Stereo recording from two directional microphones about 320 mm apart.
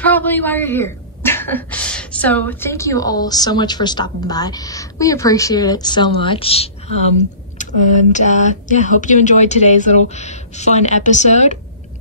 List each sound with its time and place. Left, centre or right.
0.0 s speech: centre
8.1 s speech: left